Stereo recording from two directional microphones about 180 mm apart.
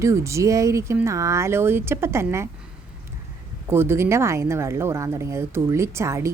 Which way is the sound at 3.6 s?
15° right (ahead or behind).